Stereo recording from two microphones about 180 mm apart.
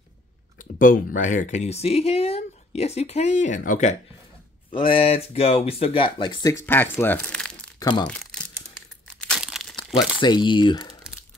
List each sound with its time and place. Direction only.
0.6 s speech: 50° left (ahead or behind)
4.6 s speech: 30° left (ahead or behind)
6.6 s speech: 10° left (ahead or behind)
8.1 s crumpling: 5° left (ahead or behind)
10.2 s speech: 25° left (ahead or behind)